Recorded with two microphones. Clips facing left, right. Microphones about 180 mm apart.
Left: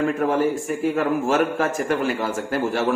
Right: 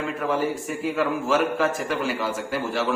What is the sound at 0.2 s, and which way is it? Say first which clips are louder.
A man's voice: left 4 dB; 50° left (ahead or behind).